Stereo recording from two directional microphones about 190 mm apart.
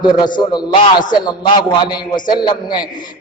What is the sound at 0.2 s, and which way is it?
Speech, 25° left (ahead or behind).